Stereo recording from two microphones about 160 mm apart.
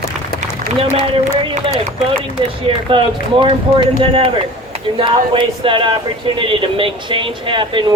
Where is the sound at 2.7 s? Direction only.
35° right (ahead or behind).